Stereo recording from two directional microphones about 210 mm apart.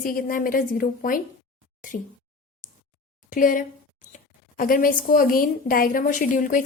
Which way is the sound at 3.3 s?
40° left (ahead or behind).